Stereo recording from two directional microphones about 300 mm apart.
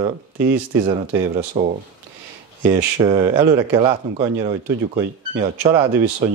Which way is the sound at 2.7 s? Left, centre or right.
Centre.